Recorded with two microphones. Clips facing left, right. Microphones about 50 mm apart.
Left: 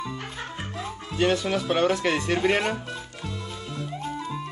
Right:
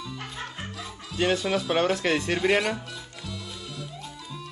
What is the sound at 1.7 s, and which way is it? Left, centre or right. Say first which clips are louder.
Speech: left 1 dB; centre.